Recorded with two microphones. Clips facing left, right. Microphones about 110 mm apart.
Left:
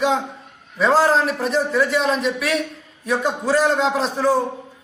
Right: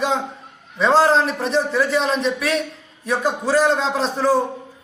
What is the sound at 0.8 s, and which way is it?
A man's voice, 5° left (ahead or behind).